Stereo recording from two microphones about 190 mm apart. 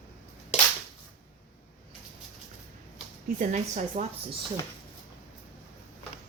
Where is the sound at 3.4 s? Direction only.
40° right (ahead or behind).